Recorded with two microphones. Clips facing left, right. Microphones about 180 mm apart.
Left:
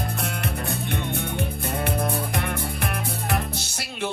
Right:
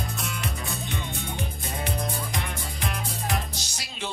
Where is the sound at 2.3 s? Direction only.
60° left (ahead or behind).